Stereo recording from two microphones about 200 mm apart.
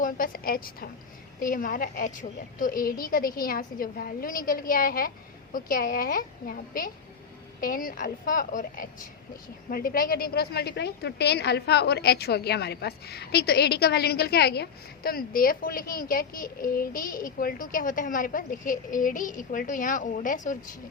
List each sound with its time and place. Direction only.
0.0 s a woman's voice: 45° left (ahead or behind)